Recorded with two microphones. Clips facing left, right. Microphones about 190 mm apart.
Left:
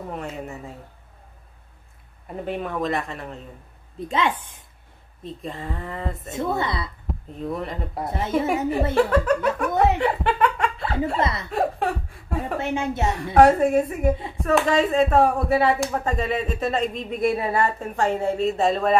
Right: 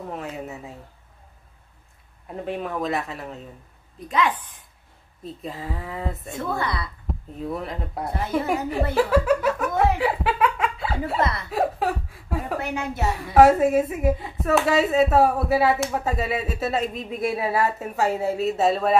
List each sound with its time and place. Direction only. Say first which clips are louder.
0.1 s speech: even; centre (ahead or behind)
2.2 s speech: left 1 dB; centre (ahead or behind)
4.1 s a woman's voice: right 1 dB; 25° left (ahead or behind)
5.2 s speech: left 1 dB; 5° right (ahead or behind)
6.3 s a woman's voice: left 3 dB; 25° left (ahead or behind)
7.1 s speech: even; centre (ahead or behind)
8.9 s laughter: right 1 dB; 5° right (ahead or behind)
11.1 s a woman's voice: even; 20° left (ahead or behind)
11.5 s speech: right 1 dB; centre (ahead or behind)
12.5 s a woman's voice: left 5 dB; 25° left (ahead or behind)
13.2 s speech: even; centre (ahead or behind)